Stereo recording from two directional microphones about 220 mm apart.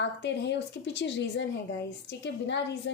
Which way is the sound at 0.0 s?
50° left (ahead or behind).